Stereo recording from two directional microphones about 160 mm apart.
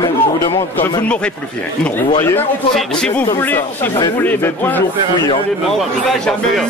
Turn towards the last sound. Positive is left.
turn(degrees=10)  # may be behind; listen again after turning